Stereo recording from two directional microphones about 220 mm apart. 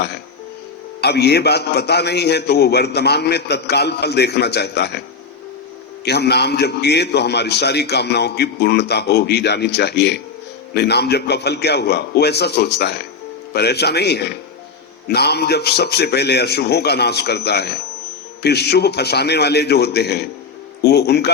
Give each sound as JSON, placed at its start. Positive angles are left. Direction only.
{"t": 1.0, "sound": "a man's voice", "side_deg": 50}
{"t": 6.1, "sound": "a man's voice", "side_deg": 50}